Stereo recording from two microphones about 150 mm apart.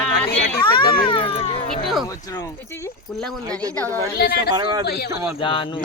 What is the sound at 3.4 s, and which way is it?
Speech, 25° right (ahead or behind).